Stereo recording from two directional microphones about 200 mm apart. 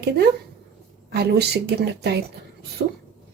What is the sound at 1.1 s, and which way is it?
Speech, 55° right (ahead or behind).